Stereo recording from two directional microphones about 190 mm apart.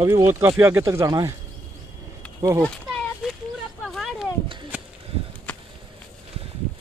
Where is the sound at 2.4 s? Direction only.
15° right (ahead or behind).